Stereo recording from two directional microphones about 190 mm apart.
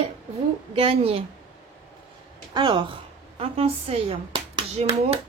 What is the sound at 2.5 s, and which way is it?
A woman's voice, 25° right (ahead or behind).